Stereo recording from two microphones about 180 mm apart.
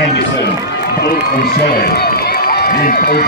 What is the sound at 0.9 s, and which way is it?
Speech, 60° left (ahead or behind).